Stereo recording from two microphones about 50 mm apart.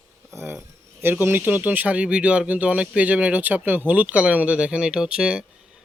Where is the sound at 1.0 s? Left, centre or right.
Right.